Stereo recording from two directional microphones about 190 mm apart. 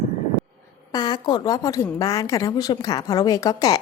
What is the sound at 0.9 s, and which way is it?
A woman's voice, 20° left (ahead or behind).